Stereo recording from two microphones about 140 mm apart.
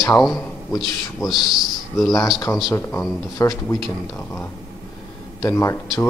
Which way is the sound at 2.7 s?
20° left (ahead or behind).